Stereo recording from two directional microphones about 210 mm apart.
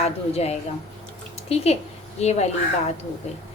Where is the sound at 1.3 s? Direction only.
30° left (ahead or behind).